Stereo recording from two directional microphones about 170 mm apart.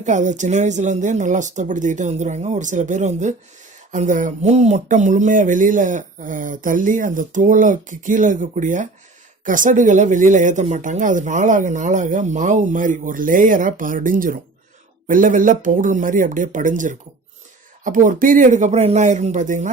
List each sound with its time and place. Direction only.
0.0 s speech: 45° right (ahead or behind)